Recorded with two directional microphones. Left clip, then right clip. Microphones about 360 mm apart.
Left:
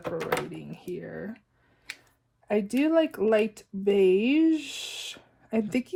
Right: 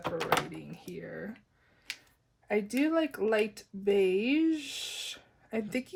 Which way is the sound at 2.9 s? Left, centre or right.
Centre.